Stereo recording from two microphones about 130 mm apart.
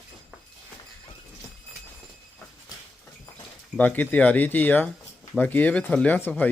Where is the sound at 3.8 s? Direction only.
10° left (ahead or behind).